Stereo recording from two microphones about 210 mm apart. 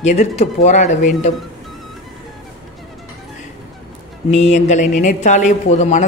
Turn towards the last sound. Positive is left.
turn(degrees=35)  # may be behind; listen again after turning